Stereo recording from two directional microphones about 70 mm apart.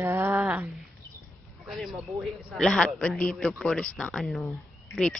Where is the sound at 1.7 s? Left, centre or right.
Centre.